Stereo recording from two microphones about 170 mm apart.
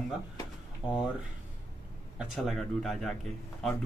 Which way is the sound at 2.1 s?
Centre (ahead or behind).